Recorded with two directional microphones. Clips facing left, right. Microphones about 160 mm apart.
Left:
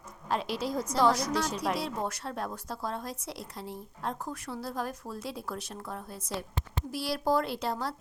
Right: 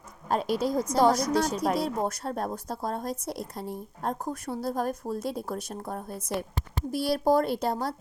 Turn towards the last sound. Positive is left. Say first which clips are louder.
# right 5 dB
turn(degrees=-45)  # may be behind; listen again after turning